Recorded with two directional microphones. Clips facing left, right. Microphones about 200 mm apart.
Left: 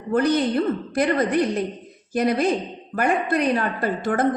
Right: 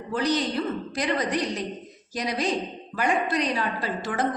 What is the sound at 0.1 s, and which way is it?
A woman's voice, 55° left (ahead or behind).